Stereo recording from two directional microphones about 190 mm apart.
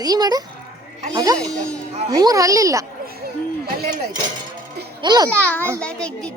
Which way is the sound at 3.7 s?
55° right (ahead or behind).